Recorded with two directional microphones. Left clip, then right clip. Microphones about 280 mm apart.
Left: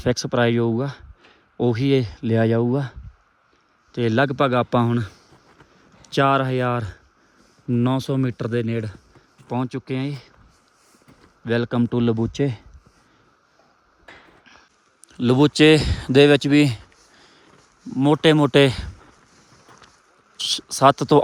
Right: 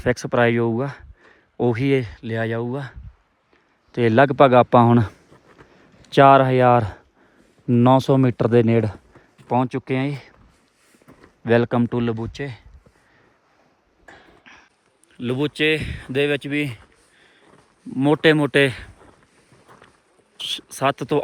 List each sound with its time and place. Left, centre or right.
0.0 s speech: centre
3.9 s speech: centre
12.1 s speech: left
14.0 s a sound: centre
15.1 s speech: left
17.5 s speech: centre
19.6 s boat: centre
20.5 s speech: centre